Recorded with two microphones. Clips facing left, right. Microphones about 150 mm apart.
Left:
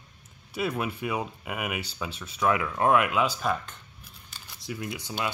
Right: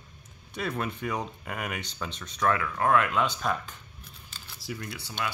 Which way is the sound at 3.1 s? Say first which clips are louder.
Left 1 dB; 5° left (ahead or behind).